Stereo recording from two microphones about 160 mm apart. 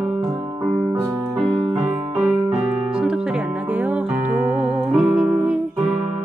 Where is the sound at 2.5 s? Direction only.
5° right (ahead or behind).